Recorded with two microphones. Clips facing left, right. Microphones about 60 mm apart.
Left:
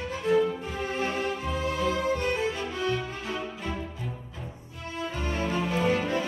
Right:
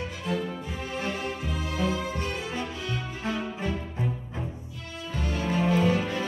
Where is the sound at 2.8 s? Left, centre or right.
Right.